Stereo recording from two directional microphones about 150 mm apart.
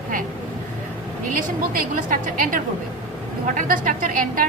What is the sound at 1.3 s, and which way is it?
A woman's voice, 65° right (ahead or behind).